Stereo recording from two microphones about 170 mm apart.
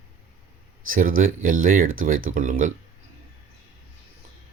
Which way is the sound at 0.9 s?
55° right (ahead or behind).